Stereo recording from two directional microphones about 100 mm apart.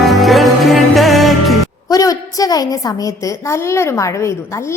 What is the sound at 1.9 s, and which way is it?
A woman's voice, 35° left (ahead or behind).